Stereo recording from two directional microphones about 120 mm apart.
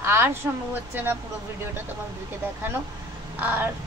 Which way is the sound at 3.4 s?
15° right (ahead or behind).